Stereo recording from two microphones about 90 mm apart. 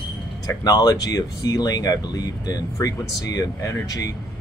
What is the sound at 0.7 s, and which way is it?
Speech, 45° left (ahead or behind).